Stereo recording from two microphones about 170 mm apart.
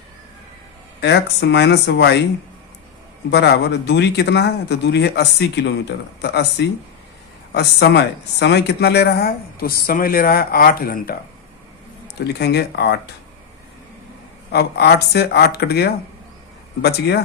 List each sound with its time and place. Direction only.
1.0 s speech: 90° left
3.2 s speech: 80° left; by 11.1 s 60° left (ahead or behind)
12.0 s speech: 70° left (ahead or behind)
14.5 s speech: 70° left (ahead or behind)